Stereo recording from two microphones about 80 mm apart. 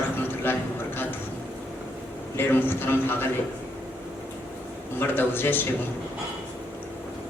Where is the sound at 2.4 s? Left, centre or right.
Left.